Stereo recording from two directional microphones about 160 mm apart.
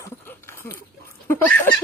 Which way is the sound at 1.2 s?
10° left (ahead or behind).